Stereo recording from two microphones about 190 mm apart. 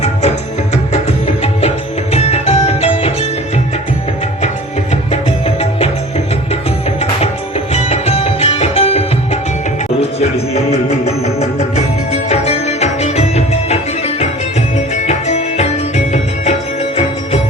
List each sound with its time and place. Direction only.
0.0 s music: 35° left (ahead or behind)
2.1 s music: 35° left (ahead or behind)
7.7 s music: 35° left (ahead or behind)
15.0 s music: 35° left (ahead or behind)